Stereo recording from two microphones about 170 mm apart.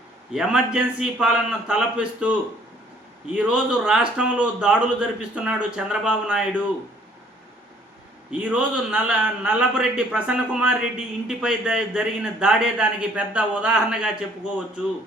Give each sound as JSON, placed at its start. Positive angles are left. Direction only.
{"t": 0.3, "sound": "a man's voice", "side_deg": -5}
{"t": 3.3, "sound": "a man's voice", "side_deg": -5}
{"t": 8.3, "sound": "a man's voice", "side_deg": -10}